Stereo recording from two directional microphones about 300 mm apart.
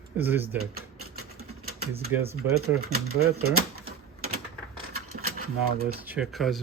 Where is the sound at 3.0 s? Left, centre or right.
Right.